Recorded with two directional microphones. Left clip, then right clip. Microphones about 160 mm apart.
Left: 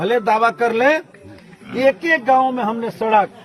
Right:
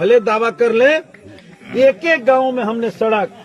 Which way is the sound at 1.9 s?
20° left (ahead or behind).